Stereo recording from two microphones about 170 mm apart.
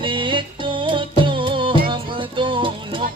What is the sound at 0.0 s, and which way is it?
Music, 30° right (ahead or behind).